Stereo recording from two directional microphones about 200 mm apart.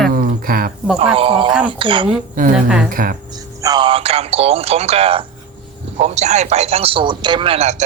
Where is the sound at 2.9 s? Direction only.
45° right (ahead or behind).